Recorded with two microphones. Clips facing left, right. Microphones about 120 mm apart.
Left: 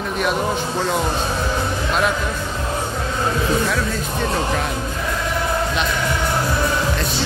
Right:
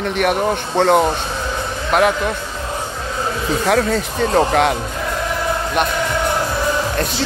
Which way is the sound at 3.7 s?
80° right.